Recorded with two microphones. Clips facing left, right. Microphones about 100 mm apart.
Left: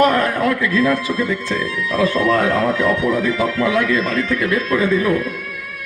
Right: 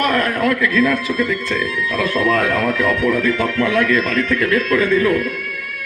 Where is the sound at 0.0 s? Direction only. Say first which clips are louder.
Left 2 dB; 20° left (ahead or behind).